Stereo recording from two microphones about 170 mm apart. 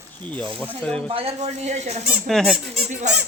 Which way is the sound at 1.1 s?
35° right (ahead or behind).